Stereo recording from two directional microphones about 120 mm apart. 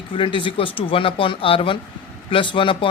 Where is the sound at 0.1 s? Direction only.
45° left (ahead or behind).